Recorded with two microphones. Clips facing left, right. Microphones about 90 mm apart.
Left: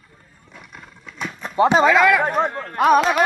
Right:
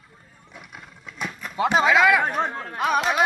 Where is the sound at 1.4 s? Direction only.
35° left (ahead or behind).